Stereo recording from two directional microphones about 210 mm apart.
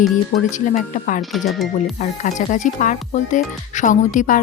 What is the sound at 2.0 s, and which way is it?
Speech, 35° left (ahead or behind).